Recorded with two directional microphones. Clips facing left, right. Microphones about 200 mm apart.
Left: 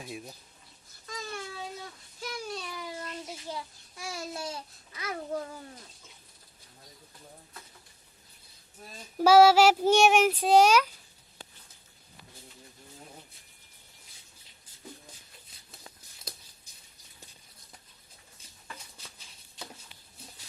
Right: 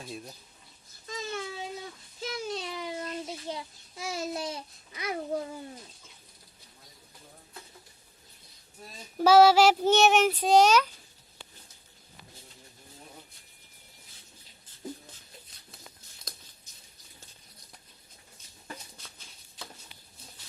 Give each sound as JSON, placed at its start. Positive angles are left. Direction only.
{"t": 0.0, "sound": "speech", "side_deg": 10}
{"t": 1.0, "sound": "a sound", "side_deg": -25}
{"t": 2.2, "sound": "child singing", "side_deg": -25}
{"t": 9.1, "sound": "speech", "side_deg": 10}